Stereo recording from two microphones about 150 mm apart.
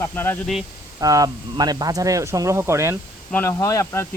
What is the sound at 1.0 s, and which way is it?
Speech, 25° right (ahead or behind).